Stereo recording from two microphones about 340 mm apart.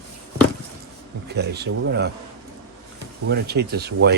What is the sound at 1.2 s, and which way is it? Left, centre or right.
Speech, right.